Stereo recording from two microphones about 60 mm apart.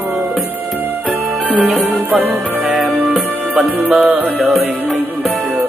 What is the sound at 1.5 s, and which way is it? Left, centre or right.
Music, right.